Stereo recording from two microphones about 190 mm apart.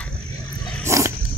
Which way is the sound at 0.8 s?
15° right (ahead or behind).